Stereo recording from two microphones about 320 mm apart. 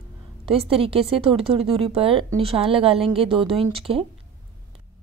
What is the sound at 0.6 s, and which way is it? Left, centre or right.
Speech, centre.